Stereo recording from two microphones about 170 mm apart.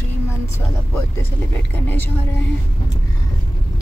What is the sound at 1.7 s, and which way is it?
Speech, 10° left (ahead or behind).